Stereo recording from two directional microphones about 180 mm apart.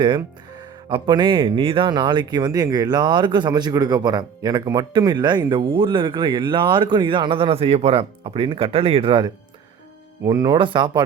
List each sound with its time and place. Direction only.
0.9 s speech: 25° right (ahead or behind)